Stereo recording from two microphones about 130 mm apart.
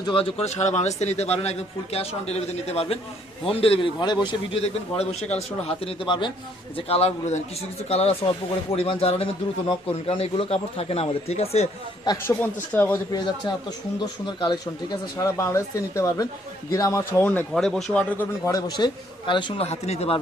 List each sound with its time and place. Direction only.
0.0 s speech: 45° left (ahead or behind)
4.5 s a man's voice: 55° left (ahead or behind); by 6.3 s 40° left (ahead or behind)
6.7 s a man's voice: 50° left (ahead or behind)
12.1 s speech: 20° left (ahead or behind)
13.1 s speech: 30° left (ahead or behind); by 17.4 s 15° left (ahead or behind)
17.5 s speech: centre (ahead or behind)
18.2 s speech: 25° left (ahead or behind)
19.3 s speech: 40° left (ahead or behind)
19.6 s speech: 55° left (ahead or behind)